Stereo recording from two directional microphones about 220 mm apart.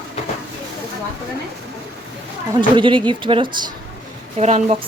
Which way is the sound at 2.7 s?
20° right (ahead or behind).